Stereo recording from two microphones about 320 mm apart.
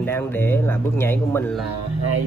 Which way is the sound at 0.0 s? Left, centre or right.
Centre.